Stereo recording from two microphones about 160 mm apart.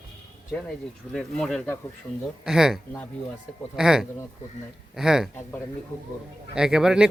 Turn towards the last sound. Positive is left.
turn(degrees=-5)  # may be behind; listen again after turning